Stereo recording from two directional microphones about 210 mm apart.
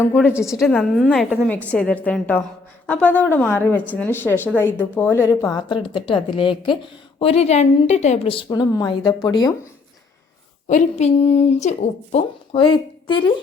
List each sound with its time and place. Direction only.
0.0 s a woman's voice: 5° left (ahead or behind)
0.6 s a woman's voice: centre (ahead or behind); by 9.5 s 15° left (ahead or behind)
10.7 s a woman's voice: 35° left (ahead or behind)